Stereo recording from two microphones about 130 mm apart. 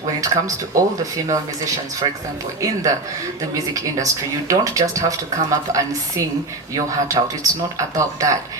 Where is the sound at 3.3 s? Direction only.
25° right (ahead or behind).